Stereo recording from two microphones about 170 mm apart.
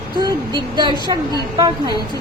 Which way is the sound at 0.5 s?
25° right (ahead or behind).